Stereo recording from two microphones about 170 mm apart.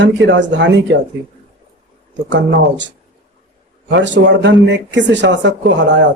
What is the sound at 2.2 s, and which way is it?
Speech, 90° right.